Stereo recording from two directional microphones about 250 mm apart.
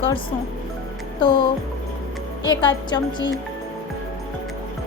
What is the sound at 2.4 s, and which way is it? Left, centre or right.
Speech, centre.